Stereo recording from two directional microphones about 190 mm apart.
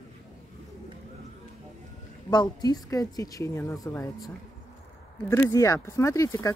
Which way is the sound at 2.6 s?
20° left (ahead or behind).